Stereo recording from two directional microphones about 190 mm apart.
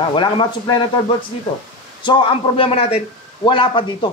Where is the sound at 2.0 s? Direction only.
25° left (ahead or behind).